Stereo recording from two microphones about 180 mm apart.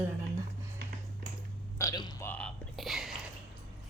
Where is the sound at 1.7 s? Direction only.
20° left (ahead or behind).